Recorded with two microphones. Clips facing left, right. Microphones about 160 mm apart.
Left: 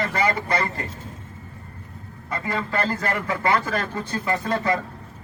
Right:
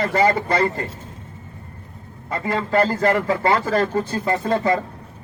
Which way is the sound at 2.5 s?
35° right (ahead or behind).